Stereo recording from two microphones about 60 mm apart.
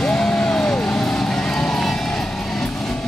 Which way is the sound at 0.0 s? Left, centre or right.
Centre.